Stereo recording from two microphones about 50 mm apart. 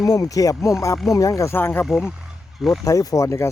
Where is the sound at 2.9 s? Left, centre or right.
Left.